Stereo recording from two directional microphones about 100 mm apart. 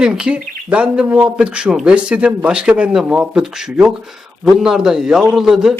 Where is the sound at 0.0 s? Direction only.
10° right (ahead or behind).